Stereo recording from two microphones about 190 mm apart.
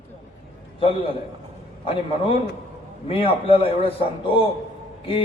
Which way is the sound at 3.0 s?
30° left (ahead or behind).